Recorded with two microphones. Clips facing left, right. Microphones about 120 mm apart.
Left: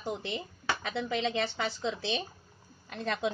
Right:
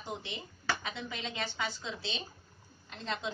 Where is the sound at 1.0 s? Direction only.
65° left (ahead or behind).